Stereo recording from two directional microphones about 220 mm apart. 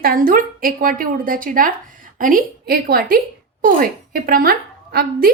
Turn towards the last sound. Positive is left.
turn(degrees=-45)  # may be behind; listen again after turning